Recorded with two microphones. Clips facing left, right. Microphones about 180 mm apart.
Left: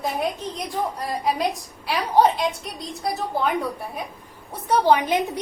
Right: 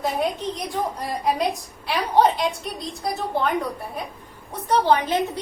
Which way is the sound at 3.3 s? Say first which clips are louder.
Right 1 dB; centre (ahead or behind).